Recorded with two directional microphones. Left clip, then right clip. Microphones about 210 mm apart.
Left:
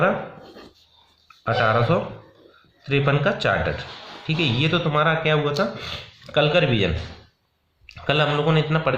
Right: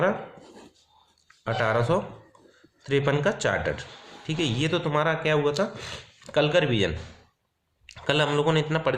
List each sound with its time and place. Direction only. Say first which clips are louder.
1.5 s speech: left 5 dB; 45° right (ahead or behind)